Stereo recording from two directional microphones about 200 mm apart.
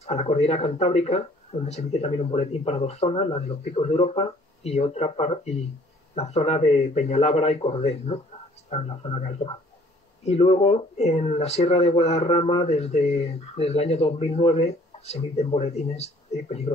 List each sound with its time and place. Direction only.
0.0 s speech: 30° left (ahead or behind)